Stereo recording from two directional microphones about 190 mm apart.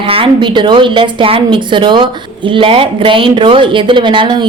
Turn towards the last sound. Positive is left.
turn(degrees=-25)  # may be behind; listen again after turning